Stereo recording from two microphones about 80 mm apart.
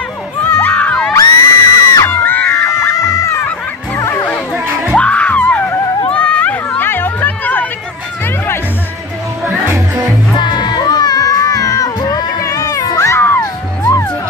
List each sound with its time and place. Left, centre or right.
0.4 s crowd: left
1.1 s music: left
2.0 s music: left
4.9 s music: centre
6.1 s run: centre
9.7 s music: right
10.3 s music: left